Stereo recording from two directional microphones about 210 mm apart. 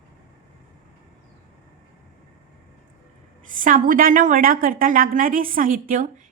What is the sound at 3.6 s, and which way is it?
A woman's voice, 40° right (ahead or behind).